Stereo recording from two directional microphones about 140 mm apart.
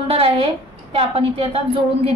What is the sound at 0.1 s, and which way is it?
A woman's voice, 40° right (ahead or behind).